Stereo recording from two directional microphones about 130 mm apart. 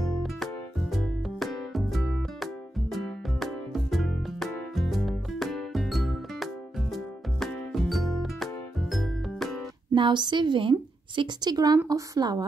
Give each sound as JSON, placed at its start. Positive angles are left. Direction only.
{"t": 0.2, "sound": "music", "side_deg": 0}
{"t": 9.9, "sound": "a woman's voice", "side_deg": -35}